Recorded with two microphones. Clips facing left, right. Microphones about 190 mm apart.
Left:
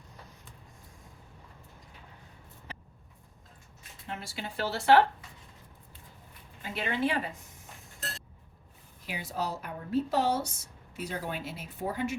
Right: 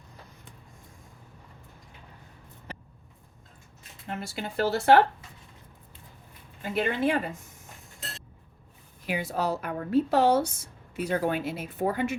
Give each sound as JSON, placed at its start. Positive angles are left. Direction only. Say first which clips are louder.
{"t": 4.1, "sound": "speech", "louder": "right 5 dB", "side_deg": -45}
{"t": 6.6, "sound": "speech", "louder": "right 4 dB", "side_deg": -50}
{"t": 9.0, "sound": "a woman's voice", "louder": "right 6 dB", "side_deg": -60}